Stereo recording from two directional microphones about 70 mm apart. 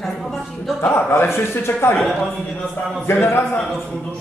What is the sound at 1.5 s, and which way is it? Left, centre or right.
Speech, left.